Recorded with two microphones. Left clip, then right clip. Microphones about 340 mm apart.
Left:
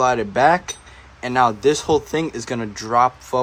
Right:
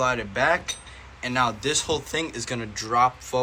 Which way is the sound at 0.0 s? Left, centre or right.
Left.